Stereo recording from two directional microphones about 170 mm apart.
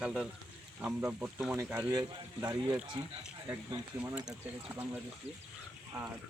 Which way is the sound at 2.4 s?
25° right (ahead or behind).